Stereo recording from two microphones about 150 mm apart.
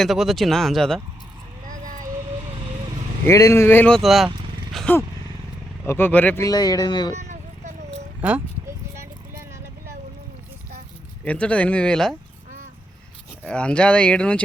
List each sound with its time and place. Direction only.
0.0 s speech: centre (ahead or behind)
3.2 s speech: 20° left (ahead or behind); by 4.3 s centre (ahead or behind)
4.7 s vehicle: 5° left (ahead or behind)
5.8 s speech: 15° left (ahead or behind)
6.4 s speech: 25° left (ahead or behind)
7.2 s a sound: 50° right (ahead or behind)
8.2 s speech: 10° right (ahead or behind)
11.3 s speech: 10° left (ahead or behind)
13.4 s speech: 5° left (ahead or behind)